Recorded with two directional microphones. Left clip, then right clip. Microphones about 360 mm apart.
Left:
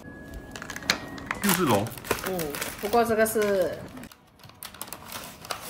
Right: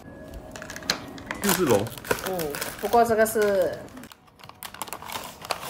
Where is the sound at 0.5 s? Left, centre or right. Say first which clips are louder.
Left 1 dB; centre.